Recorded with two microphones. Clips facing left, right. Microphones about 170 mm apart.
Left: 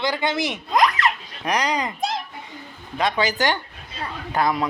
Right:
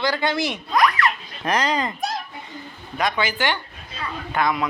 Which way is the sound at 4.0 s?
35° left (ahead or behind).